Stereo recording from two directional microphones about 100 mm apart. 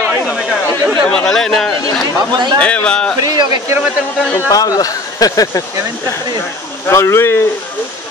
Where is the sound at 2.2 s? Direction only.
45° right (ahead or behind).